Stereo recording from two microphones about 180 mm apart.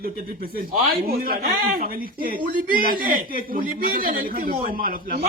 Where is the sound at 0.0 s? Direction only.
55° right (ahead or behind).